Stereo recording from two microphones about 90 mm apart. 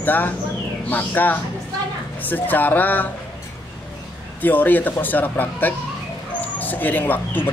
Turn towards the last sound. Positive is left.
turn(degrees=20)  # may be behind; listen again after turning